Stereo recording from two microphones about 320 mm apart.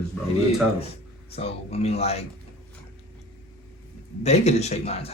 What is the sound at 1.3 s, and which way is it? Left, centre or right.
Speech, centre.